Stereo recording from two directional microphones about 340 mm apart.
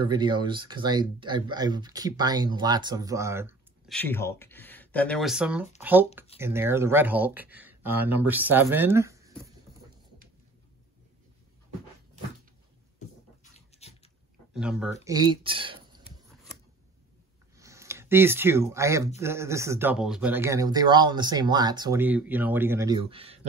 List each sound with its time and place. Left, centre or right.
0.0 s speech: centre
13.4 s dog: centre
14.5 s speech: centre
17.6 s speech: centre